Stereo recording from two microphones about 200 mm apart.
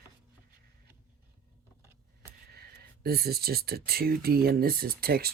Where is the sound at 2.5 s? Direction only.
50° right (ahead or behind).